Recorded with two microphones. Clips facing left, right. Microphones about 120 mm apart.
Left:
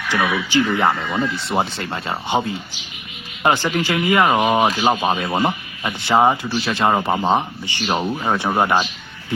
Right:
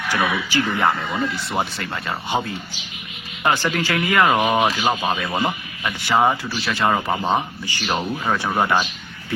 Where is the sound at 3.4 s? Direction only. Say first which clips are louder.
Left 2 dB; 20° left (ahead or behind).